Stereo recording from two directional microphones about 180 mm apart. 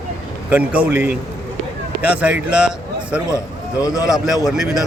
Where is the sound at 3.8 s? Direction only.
20° left (ahead or behind).